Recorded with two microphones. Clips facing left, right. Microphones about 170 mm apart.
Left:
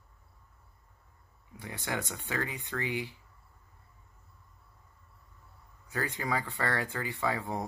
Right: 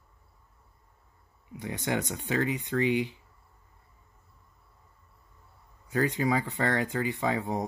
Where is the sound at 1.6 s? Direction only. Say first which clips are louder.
Right 6 dB; 20° right (ahead or behind).